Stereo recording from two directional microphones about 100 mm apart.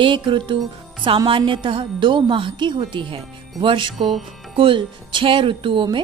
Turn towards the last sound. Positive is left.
turn(degrees=-55)  # may be behind; listen again after turning